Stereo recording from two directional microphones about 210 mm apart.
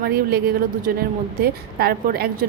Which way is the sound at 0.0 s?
45° right (ahead or behind).